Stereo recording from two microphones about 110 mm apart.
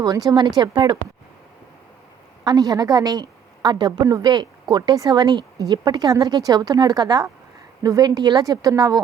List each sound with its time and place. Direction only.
0.0 s speech: 35° right (ahead or behind)
2.4 s a woman's voice: 35° right (ahead or behind)